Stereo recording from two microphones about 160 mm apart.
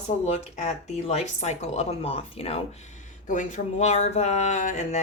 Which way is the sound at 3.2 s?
50° left (ahead or behind).